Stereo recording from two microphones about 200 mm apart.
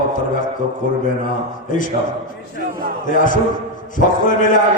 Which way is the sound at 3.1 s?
40° left (ahead or behind).